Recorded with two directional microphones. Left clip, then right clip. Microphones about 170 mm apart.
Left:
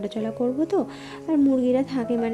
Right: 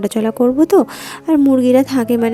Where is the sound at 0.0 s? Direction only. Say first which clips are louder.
Right 11 dB; 40° right (ahead or behind).